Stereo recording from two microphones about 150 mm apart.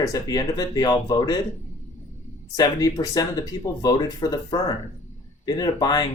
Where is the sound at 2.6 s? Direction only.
25° left (ahead or behind).